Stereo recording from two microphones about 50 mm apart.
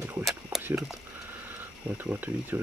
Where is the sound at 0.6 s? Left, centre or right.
Right.